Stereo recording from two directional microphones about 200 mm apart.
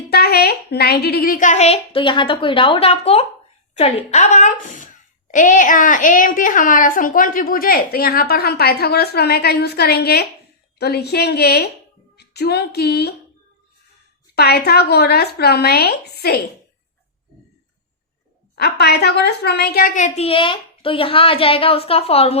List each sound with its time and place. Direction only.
0.1 s a woman's voice: 50° left (ahead or behind)
14.3 s a woman's voice: 55° left (ahead or behind)
18.5 s a woman's voice: 55° left (ahead or behind)
20.1 s a woman's voice: 30° left (ahead or behind)